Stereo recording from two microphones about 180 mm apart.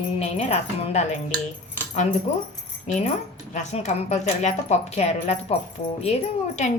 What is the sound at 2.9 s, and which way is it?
Speech, 40° left (ahead or behind).